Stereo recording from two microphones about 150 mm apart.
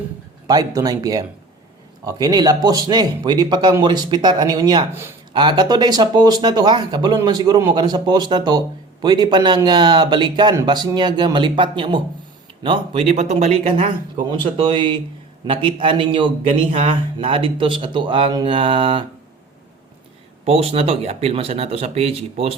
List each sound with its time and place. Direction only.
0.4 s speech: 25° right (ahead or behind)
4.9 s speech: 15° right (ahead or behind)
5.3 s speech: 30° right (ahead or behind)
14.3 s speech: 35° right (ahead or behind)
20.4 s speech: 40° right (ahead or behind)